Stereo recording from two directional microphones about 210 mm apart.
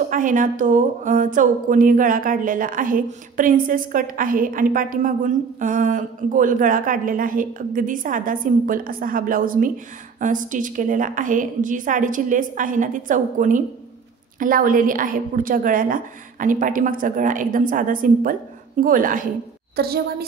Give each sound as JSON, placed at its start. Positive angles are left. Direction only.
{"t": 0.1, "sound": "a woman's voice", "side_deg": -40}